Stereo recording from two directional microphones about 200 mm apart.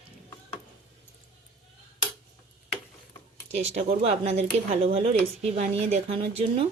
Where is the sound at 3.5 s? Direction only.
30° right (ahead or behind).